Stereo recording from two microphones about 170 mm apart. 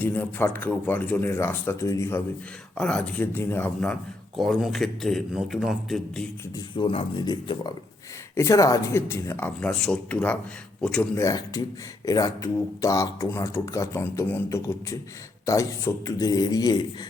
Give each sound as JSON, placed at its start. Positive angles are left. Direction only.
{"t": 0.0, "sound": "speech", "side_deg": 10}
{"t": 2.7, "sound": "a man's voice", "side_deg": 5}
{"t": 6.7, "sound": "speech", "side_deg": 30}
{"t": 11.2, "sound": "speech", "side_deg": 20}